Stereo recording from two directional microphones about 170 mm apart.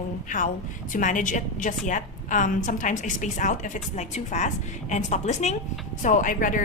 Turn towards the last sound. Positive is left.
turn(degrees=50)  # may be behind; listen again after turning